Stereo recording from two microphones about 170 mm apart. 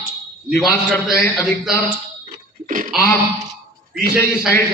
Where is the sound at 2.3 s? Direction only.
55° right (ahead or behind).